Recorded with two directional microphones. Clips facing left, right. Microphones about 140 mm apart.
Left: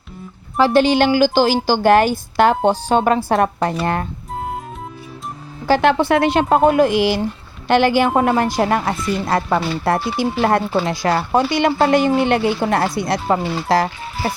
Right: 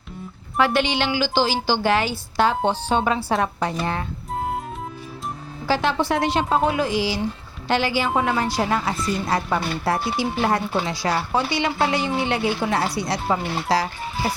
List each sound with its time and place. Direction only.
0.5 s a woman's voice: 30° left (ahead or behind); by 4.0 s 55° left (ahead or behind)
5.6 s a woman's voice: 55° left (ahead or behind)